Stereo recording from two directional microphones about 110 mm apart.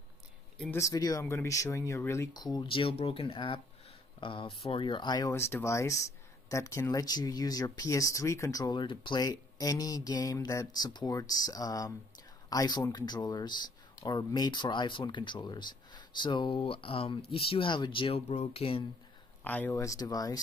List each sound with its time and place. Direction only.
0.7 s speech: 30° left (ahead or behind)
2.3 s speech: 40° left (ahead or behind)
2.6 s speech: 55° left (ahead or behind)
5.3 s speech: 25° left (ahead or behind)
8.7 s speech: 45° left (ahead or behind)
18.3 s speech: 75° left (ahead or behind); by 18.9 s 55° left (ahead or behind)
19.4 s speech: 15° left (ahead or behind)
19.8 s speech: 35° left (ahead or behind)